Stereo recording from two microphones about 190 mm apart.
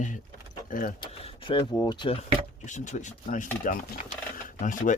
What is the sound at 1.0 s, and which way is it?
Speech, 25° left (ahead or behind).